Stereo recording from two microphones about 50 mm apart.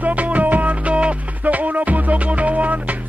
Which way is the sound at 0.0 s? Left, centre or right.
Right.